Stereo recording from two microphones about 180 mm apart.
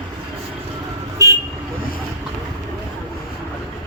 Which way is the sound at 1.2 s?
20° right (ahead or behind).